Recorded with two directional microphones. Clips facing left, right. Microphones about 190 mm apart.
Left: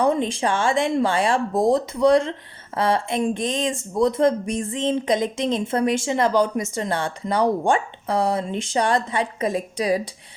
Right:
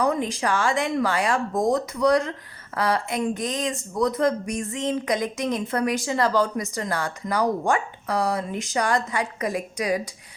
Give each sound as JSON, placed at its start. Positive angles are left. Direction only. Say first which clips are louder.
{"t": 0.0, "sound": "speech", "louder": "left 3 dB", "side_deg": 25}